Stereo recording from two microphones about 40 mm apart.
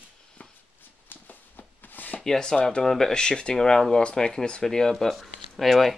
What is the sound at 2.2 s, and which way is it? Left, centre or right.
Speech, centre.